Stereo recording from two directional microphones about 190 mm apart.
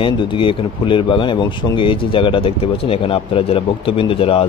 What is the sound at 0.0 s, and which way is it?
Speech, 25° left (ahead or behind).